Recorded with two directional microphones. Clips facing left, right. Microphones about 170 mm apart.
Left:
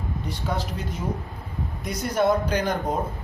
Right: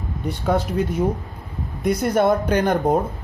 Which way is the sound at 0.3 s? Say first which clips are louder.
Right 9 dB; 55° right (ahead or behind).